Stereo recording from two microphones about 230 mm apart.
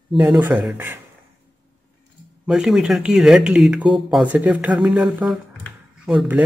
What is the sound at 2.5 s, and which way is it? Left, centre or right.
Speech, centre.